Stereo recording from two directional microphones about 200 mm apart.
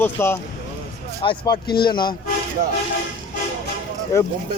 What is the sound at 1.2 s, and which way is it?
Speech, 20° left (ahead or behind).